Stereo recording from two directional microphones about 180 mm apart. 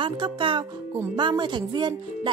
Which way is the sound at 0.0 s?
25° right (ahead or behind).